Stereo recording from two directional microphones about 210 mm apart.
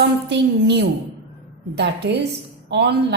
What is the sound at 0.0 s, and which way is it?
A woman's voice, 55° right (ahead or behind).